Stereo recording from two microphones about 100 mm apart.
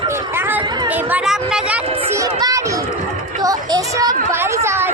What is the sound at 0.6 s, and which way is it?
Chatter, 45° right (ahead or behind).